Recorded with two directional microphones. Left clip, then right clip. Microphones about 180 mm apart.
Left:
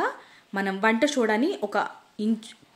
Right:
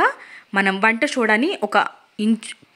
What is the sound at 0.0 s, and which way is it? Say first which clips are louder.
Speech: right 9 dB; 20° right (ahead or behind).